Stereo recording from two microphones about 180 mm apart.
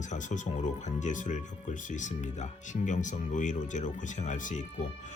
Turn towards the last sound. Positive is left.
turn(degrees=45)  # may be behind; listen again after turning